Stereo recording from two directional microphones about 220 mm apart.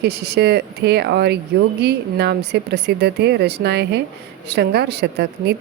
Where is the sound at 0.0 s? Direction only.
45° right (ahead or behind).